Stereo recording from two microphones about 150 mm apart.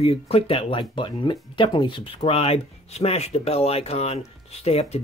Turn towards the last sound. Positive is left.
turn(degrees=45)  # may be behind; listen again after turning